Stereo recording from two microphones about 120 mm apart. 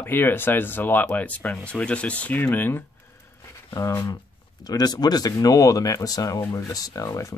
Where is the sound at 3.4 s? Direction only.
25° left (ahead or behind).